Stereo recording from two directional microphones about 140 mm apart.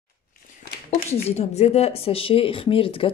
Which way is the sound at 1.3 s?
50° left (ahead or behind).